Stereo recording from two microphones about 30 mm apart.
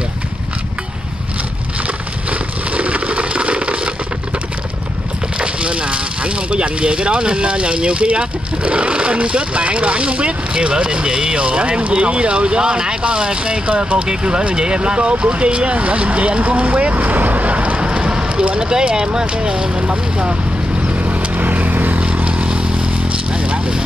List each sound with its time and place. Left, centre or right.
2.7 s a sound: right
5.4 s speech: right
16.6 s vehicle: right
18.7 s speech: right
19.8 s speech: right
21.4 s vehicle: right
22.1 s vehicle: right
23.3 s a sound: right